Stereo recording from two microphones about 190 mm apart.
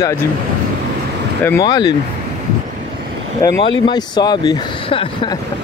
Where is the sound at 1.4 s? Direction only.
15° left (ahead or behind).